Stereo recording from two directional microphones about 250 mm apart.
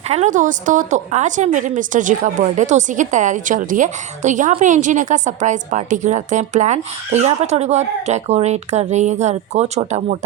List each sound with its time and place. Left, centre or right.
0.1 s a woman's voice: right